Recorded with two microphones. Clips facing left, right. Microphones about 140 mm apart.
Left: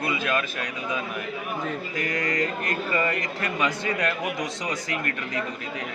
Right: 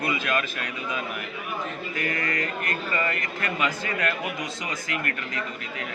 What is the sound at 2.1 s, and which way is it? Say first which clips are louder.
A man's voice: left 3 dB; 20° left (ahead or behind).